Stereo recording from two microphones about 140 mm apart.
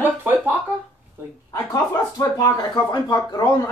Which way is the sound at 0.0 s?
15° right (ahead or behind).